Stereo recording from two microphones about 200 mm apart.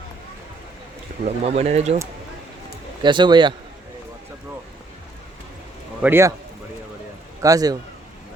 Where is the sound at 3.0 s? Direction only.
25° right (ahead or behind).